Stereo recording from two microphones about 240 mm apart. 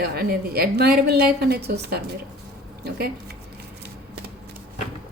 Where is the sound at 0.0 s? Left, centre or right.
Right.